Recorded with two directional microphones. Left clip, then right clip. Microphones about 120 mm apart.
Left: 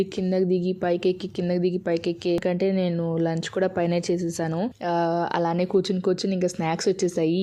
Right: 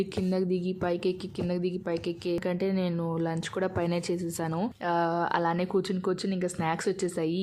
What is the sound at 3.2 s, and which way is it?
A woman's voice, 20° left (ahead or behind).